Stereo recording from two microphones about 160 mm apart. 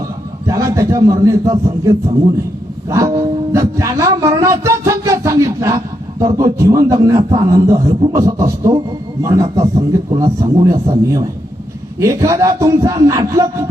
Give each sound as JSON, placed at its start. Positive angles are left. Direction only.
{"t": 0.4, "sound": "a man's voice", "side_deg": -20}
{"t": 2.9, "sound": "music", "side_deg": -20}
{"t": 7.2, "sound": "a man's voice", "side_deg": -35}
{"t": 7.5, "sound": "a man's voice", "side_deg": -20}